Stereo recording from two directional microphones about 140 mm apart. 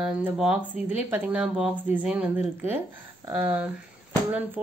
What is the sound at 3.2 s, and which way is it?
Speech, 30° right (ahead or behind).